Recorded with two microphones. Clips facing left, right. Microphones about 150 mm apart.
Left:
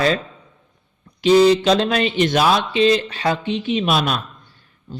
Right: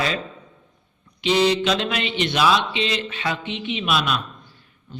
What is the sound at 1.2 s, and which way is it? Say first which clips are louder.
A man's voice: left 6 dB; 40° left (ahead or behind).